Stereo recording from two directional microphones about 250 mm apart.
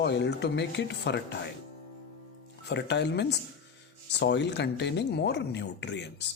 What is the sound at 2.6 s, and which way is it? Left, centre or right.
A man's voice, left.